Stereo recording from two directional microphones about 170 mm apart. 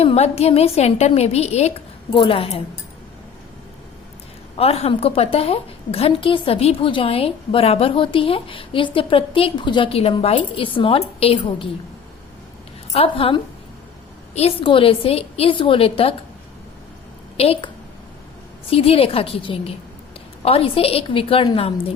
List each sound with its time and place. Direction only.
0.0 s a woman's voice: 35° left (ahead or behind)
4.5 s a woman's voice: 35° left (ahead or behind)
12.9 s a woman's voice: 35° left (ahead or behind)
17.3 s a woman's voice: 35° left (ahead or behind)
18.7 s a woman's voice: 35° left (ahead or behind)